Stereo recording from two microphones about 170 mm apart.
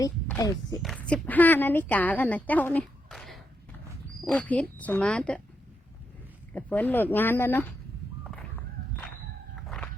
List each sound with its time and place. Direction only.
0.0 s speech: 20° left (ahead or behind)
0.8 s a woman's voice: 5° left (ahead or behind)
6.5 s a woman's voice: 10° left (ahead or behind)
8.2 s crow: 5° left (ahead or behind)
9.6 s a sound: 5° left (ahead or behind)